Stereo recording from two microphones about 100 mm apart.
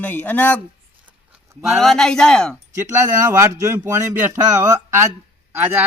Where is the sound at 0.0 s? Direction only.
20° left (ahead or behind).